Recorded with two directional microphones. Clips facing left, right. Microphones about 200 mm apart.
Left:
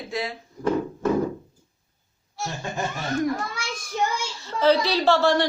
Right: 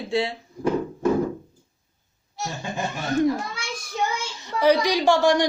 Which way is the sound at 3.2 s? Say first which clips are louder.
Right 4 dB; 25° right (ahead or behind).